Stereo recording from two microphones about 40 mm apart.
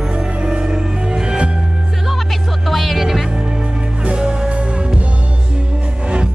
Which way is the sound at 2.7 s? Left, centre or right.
Centre.